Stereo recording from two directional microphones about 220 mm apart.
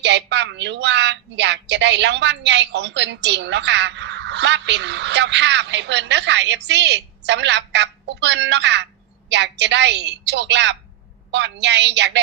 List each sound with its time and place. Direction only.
0.0 s a woman's voice: 55° right (ahead or behind)